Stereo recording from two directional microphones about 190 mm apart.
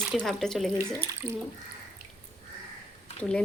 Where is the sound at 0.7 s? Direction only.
15° right (ahead or behind).